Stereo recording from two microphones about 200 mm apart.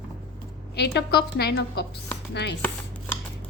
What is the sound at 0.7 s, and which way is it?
A woman's voice, 55° left (ahead or behind).